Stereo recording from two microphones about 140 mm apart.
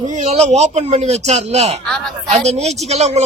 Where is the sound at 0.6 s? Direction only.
50° right (ahead or behind).